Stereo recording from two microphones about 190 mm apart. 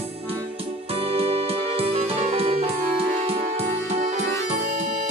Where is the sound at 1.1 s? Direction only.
30° right (ahead or behind).